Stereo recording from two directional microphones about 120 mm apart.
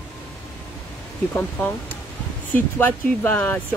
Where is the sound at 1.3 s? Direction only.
15° left (ahead or behind).